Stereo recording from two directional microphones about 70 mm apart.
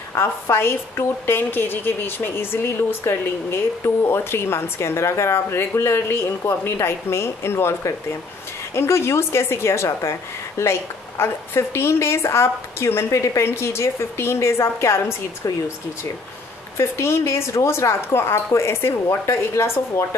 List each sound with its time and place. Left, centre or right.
0.1 s a woman's voice: left
16.7 s a woman's voice: left